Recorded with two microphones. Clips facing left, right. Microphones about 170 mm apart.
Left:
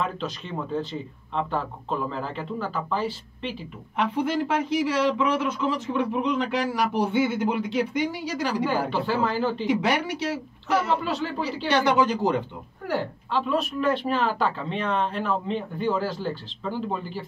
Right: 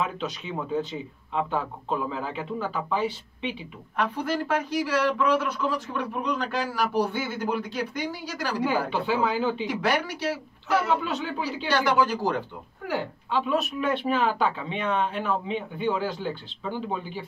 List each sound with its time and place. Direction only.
0.0 s speech: 5° right (ahead or behind)
4.0 s speech: 20° left (ahead or behind)
8.6 s speech: centre (ahead or behind)
9.7 s speech: 20° left (ahead or behind)
10.9 s speech: centre (ahead or behind)
11.7 s speech: 20° left (ahead or behind)
12.8 s speech: centre (ahead or behind)